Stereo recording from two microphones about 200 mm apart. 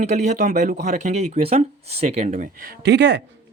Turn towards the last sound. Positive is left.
turn(degrees=-60)  # may be behind; listen again after turning